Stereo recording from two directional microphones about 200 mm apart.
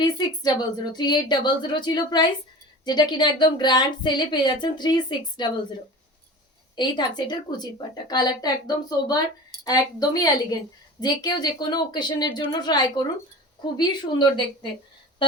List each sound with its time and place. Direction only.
0.0 s speech: 20° left (ahead or behind)
6.7 s speech: 20° left (ahead or behind)